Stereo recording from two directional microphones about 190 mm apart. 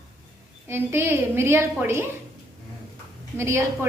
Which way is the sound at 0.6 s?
10° right (ahead or behind).